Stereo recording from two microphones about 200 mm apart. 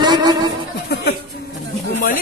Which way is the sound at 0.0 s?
20° right (ahead or behind).